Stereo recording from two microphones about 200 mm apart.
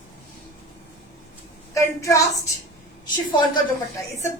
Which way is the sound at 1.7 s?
15° left (ahead or behind).